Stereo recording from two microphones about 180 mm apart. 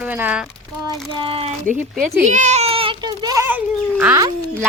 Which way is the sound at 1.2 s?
30° right (ahead or behind).